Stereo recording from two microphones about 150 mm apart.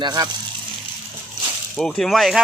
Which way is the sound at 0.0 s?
30° right (ahead or behind).